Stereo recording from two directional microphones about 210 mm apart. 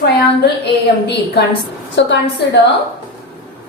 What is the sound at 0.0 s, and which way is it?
A woman's voice, 55° left (ahead or behind).